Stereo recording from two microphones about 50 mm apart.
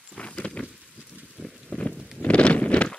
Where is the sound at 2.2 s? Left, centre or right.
Left.